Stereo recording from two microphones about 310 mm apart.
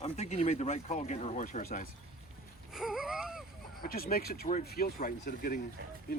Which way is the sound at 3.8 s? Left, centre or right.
Left.